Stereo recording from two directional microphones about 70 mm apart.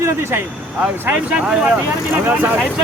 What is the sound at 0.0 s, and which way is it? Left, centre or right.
Speech, right.